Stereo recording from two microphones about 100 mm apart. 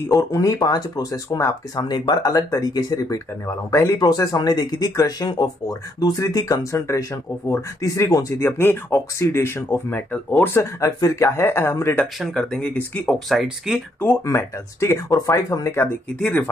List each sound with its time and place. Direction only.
0.1 s speech: 35° left (ahead or behind)
3.4 s speech: 25° left (ahead or behind)
4.0 s speech: 35° left (ahead or behind)
12.2 s speech: 5° left (ahead or behind)
13.0 s speech: centre (ahead or behind)
14.2 s speech: 25° left (ahead or behind)
16.2 s speech: 10° left (ahead or behind)